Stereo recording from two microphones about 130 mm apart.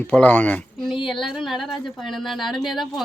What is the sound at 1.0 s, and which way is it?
Speech, centre (ahead or behind).